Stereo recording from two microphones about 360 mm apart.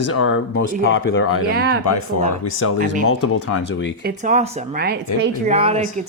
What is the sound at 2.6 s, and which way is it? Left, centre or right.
Speech, left.